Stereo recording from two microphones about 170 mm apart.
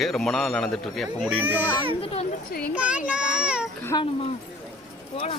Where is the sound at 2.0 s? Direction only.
35° left (ahead or behind).